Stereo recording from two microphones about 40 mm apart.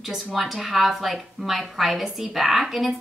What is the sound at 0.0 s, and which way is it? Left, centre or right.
A woman's voice, centre.